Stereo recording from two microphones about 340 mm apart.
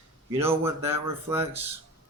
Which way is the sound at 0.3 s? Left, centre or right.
Centre.